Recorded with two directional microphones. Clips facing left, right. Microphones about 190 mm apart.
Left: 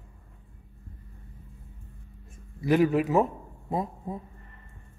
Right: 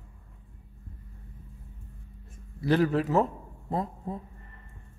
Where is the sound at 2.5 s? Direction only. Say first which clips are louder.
Left 2 dB; 10° left (ahead or behind).